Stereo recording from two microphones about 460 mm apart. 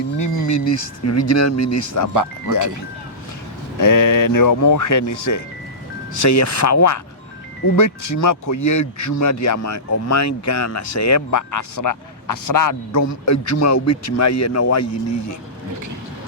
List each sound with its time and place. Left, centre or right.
0.2 s speech: left
2.1 s speech: right
3.8 s speech: left